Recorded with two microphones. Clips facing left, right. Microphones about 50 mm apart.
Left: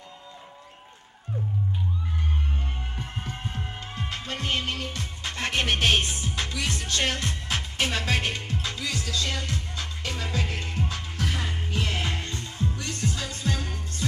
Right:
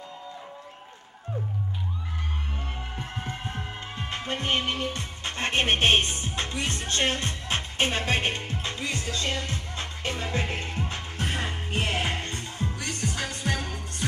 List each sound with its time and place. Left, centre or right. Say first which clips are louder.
3.0 s music: even; right